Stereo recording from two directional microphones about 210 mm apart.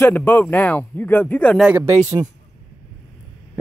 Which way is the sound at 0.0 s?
10° left (ahead or behind).